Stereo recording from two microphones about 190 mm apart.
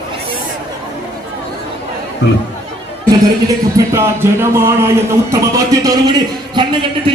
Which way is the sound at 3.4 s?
15° right (ahead or behind).